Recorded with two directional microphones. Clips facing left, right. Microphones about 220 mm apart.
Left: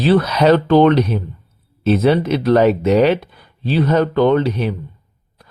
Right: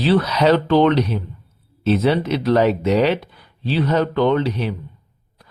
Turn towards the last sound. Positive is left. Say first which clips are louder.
# left 3 dB
turn(degrees=55)  # may be behind; listen again after turning